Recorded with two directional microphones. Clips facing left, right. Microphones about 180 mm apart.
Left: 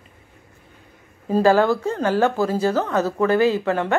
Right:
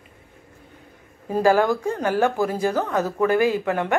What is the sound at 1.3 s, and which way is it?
A woman's voice, 15° right (ahead or behind).